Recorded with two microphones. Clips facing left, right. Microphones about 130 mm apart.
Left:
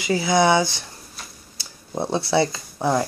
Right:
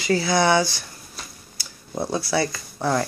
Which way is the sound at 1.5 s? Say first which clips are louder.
Left 1 dB; 25° left (ahead or behind).